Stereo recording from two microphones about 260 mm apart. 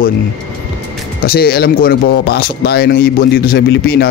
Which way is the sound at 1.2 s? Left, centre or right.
Left.